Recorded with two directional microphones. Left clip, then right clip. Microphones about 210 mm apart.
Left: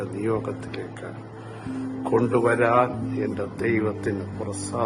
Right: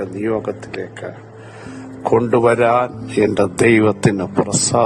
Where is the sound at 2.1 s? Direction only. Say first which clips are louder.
Right 7 dB; 40° right (ahead or behind).